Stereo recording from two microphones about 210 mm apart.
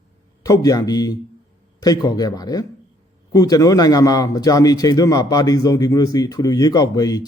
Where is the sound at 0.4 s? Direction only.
15° left (ahead or behind).